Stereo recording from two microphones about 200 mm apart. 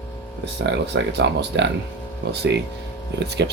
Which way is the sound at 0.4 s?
60° right (ahead or behind).